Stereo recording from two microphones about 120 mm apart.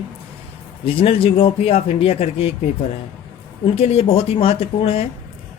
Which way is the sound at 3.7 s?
55° left (ahead or behind).